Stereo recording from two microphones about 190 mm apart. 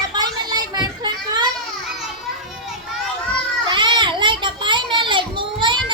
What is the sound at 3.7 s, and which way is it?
Children playing, 25° right (ahead or behind).